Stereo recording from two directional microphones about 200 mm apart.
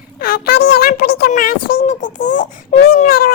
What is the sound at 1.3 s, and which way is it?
Baby cry, 45° left (ahead or behind).